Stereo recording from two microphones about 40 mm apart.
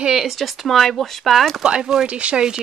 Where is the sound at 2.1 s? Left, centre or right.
Right.